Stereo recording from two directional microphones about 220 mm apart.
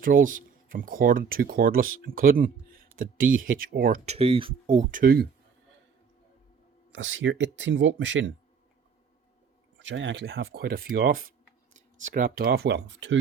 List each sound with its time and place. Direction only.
0.0 s speech: 40° right (ahead or behind)
4.0 s speech: 25° right (ahead or behind); by 5.3 s 45° right (ahead or behind)
6.9 s speech: 60° right (ahead or behind)
9.7 s speech: 55° right (ahead or behind)